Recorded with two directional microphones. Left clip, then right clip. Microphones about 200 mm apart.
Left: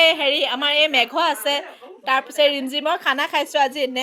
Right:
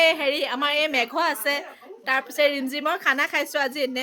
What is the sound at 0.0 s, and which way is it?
A woman's voice, centre (ahead or behind).